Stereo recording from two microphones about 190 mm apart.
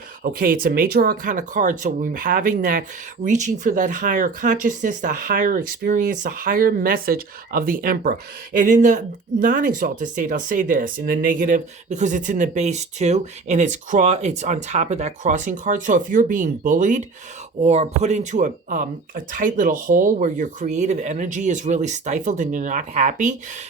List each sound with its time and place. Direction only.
0.2 s speech: 45° right (ahead or behind)